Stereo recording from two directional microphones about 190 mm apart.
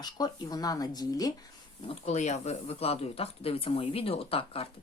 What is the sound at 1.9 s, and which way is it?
Speech, 35° left (ahead or behind).